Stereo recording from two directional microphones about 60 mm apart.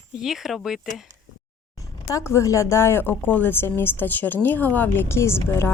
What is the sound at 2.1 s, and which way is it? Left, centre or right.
A woman's voice, left.